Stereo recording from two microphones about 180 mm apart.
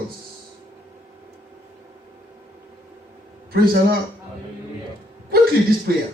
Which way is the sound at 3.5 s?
55° right (ahead or behind).